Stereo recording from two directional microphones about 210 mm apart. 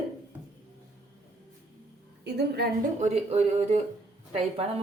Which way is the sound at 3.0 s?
30° right (ahead or behind).